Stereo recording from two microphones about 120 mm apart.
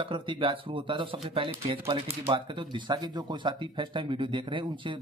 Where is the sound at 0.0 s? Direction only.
45° right (ahead or behind).